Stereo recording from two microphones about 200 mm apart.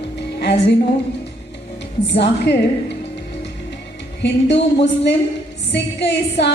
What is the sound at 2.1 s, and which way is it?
Speech, 60° left (ahead or behind).